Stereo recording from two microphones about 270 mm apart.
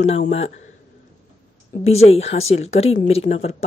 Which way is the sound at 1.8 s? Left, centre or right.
Left.